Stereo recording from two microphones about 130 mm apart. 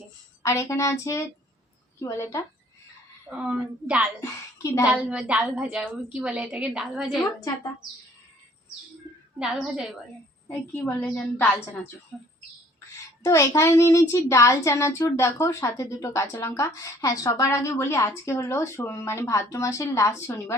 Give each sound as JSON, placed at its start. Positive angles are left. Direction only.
{"t": 0.4, "sound": "speech", "side_deg": 20}
{"t": 3.2, "sound": "a woman's voice", "side_deg": -10}
{"t": 4.2, "sound": "a woman's voice", "side_deg": 20}
{"t": 4.9, "sound": "a woman's voice", "side_deg": -10}
{"t": 9.4, "sound": "a woman's voice", "side_deg": -5}
{"t": 10.5, "sound": "a woman's voice", "side_deg": 15}
{"t": 12.1, "sound": "a woman's voice", "side_deg": 5}
{"t": 13.2, "sound": "speech", "side_deg": 25}